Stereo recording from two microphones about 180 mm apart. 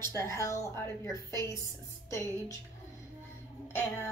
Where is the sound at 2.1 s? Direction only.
15° left (ahead or behind).